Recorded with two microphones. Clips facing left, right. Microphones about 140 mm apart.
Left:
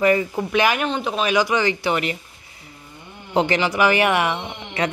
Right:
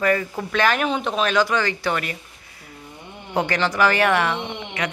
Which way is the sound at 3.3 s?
20° left (ahead or behind).